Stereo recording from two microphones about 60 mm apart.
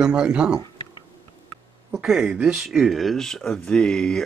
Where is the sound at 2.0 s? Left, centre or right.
Centre.